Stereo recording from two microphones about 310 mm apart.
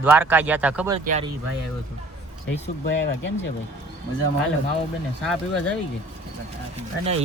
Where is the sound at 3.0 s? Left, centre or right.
Left.